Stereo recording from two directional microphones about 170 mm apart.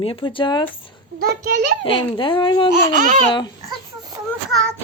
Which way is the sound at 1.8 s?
30° left (ahead or behind).